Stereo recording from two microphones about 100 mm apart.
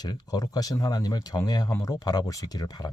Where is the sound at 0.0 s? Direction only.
40° left (ahead or behind).